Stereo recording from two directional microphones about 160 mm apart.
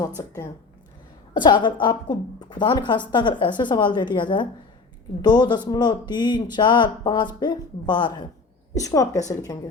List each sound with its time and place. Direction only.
0.2 s a woman's voice: 20° left (ahead or behind)